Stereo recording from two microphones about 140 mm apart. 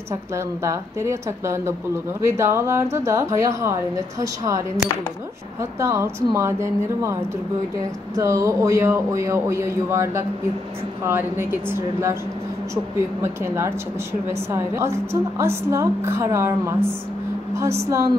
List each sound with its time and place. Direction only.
0.1 s a woman's voice: 20° right (ahead or behind)